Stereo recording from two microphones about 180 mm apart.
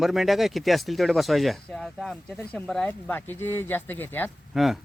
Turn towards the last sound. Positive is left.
turn(degrees=0)  # may be behind; listen again after turning